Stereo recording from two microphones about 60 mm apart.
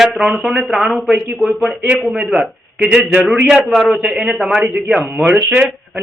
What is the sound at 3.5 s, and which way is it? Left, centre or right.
A man's voice, centre.